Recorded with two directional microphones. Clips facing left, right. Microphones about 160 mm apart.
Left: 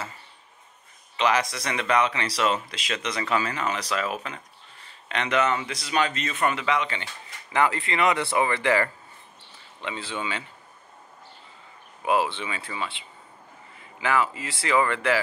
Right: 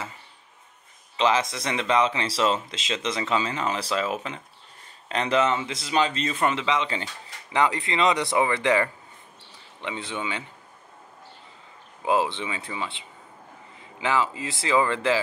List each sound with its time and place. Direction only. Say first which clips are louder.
1.1 s speech: right 1 dB; 25° right (ahead or behind)
12.0 s speech: even; 20° right (ahead or behind)